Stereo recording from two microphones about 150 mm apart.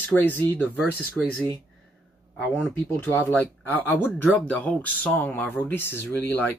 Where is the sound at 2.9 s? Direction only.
15° left (ahead or behind).